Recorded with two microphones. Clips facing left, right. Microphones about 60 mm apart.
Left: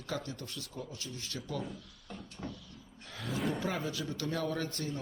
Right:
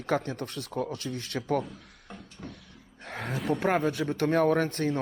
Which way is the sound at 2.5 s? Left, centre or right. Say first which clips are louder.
Even; right.